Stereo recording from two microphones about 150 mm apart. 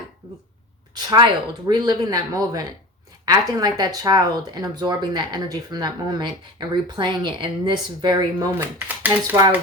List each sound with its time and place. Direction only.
0.9 s speech: 25° right (ahead or behind)